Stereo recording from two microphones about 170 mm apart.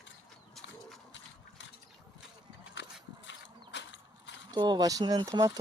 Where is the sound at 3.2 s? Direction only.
90° left.